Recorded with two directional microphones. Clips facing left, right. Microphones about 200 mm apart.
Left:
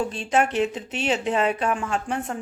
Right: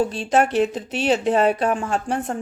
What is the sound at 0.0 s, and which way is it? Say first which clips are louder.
Speech: right 4 dB; 35° right (ahead or behind).